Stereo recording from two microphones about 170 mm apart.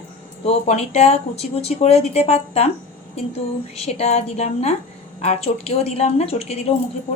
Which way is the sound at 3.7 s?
40° left (ahead or behind).